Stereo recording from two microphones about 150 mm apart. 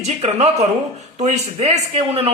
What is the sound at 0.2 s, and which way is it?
A man's voice, 45° right (ahead or behind).